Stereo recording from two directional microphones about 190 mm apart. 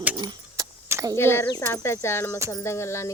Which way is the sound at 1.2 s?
15° left (ahead or behind).